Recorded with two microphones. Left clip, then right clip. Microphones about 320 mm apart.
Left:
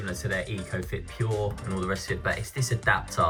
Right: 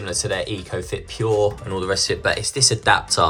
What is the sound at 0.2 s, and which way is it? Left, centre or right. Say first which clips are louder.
Speech: right 8 dB; right.